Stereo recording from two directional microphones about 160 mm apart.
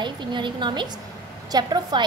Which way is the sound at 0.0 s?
30° right (ahead or behind).